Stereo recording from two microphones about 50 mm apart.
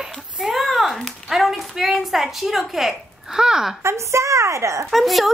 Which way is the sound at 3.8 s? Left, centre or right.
Right.